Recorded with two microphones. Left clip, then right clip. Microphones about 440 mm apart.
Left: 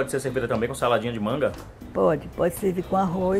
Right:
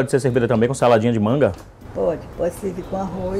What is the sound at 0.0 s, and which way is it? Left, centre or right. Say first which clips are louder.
Speech: right 7 dB; right.